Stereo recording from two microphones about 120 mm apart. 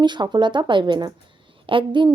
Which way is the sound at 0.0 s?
40° right (ahead or behind).